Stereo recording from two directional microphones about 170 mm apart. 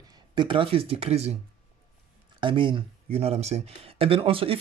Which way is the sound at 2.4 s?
30° right (ahead or behind).